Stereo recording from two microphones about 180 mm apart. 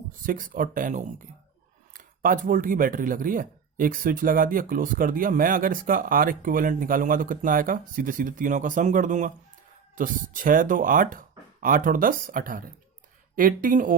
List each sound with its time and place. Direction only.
0.2 s speech: 50° right (ahead or behind)